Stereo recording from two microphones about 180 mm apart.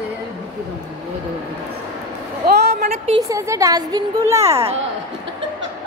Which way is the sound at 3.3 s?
20° right (ahead or behind).